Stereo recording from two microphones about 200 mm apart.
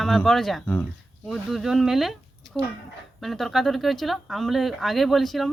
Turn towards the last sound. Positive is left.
turn(degrees=0)  # may be behind; listen again after turning